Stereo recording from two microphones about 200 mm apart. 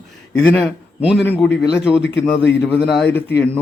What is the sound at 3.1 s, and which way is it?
Speech, 10° left (ahead or behind).